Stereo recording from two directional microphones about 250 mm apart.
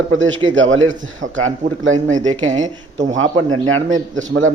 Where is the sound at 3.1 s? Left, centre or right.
Right.